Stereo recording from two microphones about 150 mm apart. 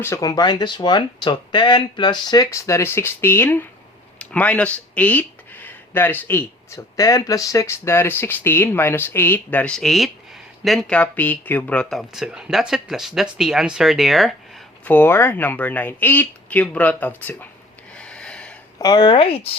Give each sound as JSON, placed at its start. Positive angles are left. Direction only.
{"t": 0.0, "sound": "speech", "side_deg": 20}
{"t": 14.8, "sound": "speech", "side_deg": 15}
{"t": 17.9, "sound": "a sound", "side_deg": 5}
{"t": 18.8, "sound": "speech", "side_deg": 30}